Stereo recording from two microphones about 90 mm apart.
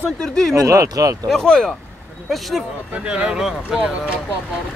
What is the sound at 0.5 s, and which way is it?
Speech, 35° right (ahead or behind).